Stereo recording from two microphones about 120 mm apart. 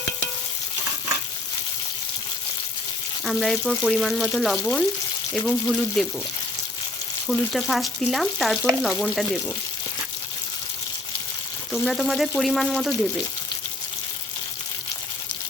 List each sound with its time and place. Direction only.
3.2 s speech: centre (ahead or behind)
7.3 s speech: centre (ahead or behind)
11.7 s speech: centre (ahead or behind)